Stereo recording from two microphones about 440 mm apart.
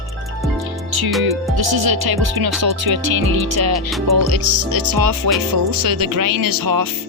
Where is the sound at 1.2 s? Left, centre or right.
Right.